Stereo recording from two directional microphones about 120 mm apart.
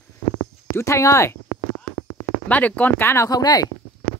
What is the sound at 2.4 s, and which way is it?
Speech, 10° left (ahead or behind).